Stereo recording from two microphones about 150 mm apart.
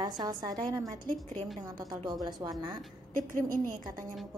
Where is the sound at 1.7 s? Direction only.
25° right (ahead or behind).